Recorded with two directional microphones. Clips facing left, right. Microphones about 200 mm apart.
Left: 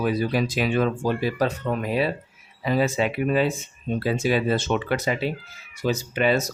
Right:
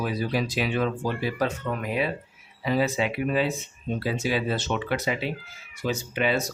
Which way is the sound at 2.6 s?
45° left (ahead or behind).